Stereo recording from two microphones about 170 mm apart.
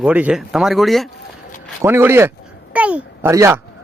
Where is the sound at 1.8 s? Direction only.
15° right (ahead or behind).